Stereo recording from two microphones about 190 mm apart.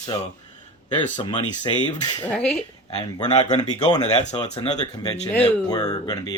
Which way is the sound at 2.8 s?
35° left (ahead or behind).